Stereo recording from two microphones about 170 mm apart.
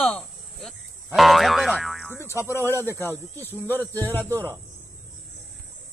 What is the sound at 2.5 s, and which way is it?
Speech, 15° left (ahead or behind).